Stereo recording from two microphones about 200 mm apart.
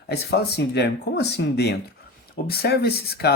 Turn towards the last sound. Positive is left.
turn(degrees=55)  # may be behind; listen again after turning